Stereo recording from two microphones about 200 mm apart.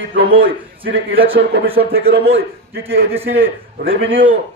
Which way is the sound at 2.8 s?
10° right (ahead or behind).